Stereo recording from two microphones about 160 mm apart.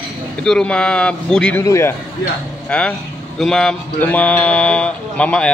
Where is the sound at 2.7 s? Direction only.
5° left (ahead or behind).